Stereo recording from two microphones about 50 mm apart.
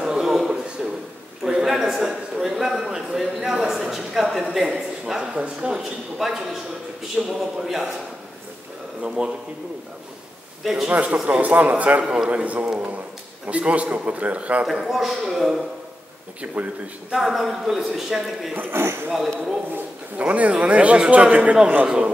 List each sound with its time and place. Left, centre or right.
0.0 s a sound: centre
3.3 s a man's voice: centre
6.1 s a man's voice: centre
9.0 s a man's voice: centre
10.6 s a man's voice: centre
10.9 s a man's voice: right
12.0 s a man's voice: centre
12.3 s a man's voice: right
14.7 s a man's voice: centre
17.1 s a man's voice: centre
18.7 s speech: right
19.7 s a man's voice: right